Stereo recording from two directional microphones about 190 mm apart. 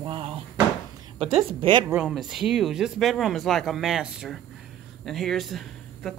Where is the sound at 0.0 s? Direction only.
25° right (ahead or behind).